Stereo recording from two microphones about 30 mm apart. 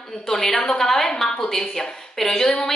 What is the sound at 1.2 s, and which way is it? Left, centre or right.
A man's voice, left.